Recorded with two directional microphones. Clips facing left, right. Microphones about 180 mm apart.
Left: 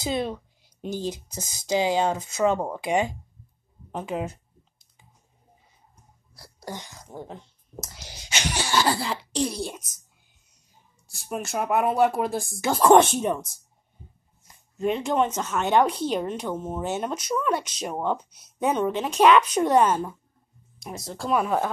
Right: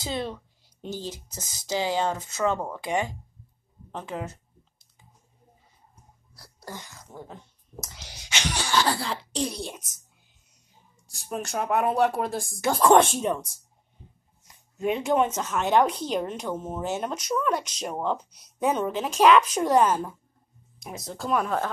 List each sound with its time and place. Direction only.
0.0 s speech: 15° left (ahead or behind)
6.3 s speech: 10° left (ahead or behind)
7.7 s speech: centre (ahead or behind)
11.1 s speech: 5° left (ahead or behind)
14.5 s speech: centre (ahead or behind)